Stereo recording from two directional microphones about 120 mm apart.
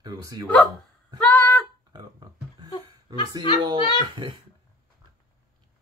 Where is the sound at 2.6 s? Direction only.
45° left (ahead or behind).